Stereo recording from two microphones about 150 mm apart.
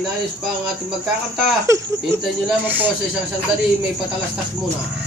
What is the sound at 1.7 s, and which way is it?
Speech, 20° right (ahead or behind).